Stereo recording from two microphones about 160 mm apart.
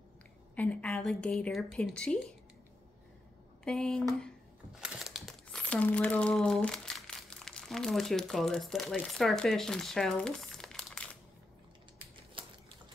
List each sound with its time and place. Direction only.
0.6 s a woman's voice: 10° left (ahead or behind)
3.6 s a woman's voice: 5° left (ahead or behind)
12.4 s typing: 35° right (ahead or behind)